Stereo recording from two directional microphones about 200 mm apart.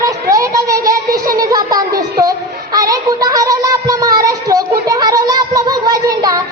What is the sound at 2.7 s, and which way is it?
Child singing, 15° right (ahead or behind).